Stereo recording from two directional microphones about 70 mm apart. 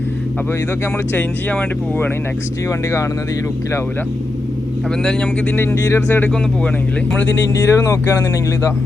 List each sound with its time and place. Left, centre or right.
1.1 s speech: left
2.6 s speech: left
5.5 s speech: left
7.6 s speech: left